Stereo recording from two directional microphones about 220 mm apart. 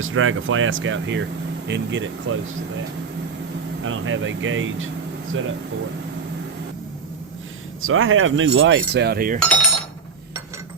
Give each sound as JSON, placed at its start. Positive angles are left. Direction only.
{"t": 0.0, "sound": "speech", "side_deg": -65}
{"t": 3.8, "sound": "speech", "side_deg": -60}
{"t": 7.8, "sound": "speech", "side_deg": -65}
{"t": 9.4, "sound": "speech", "side_deg": 5}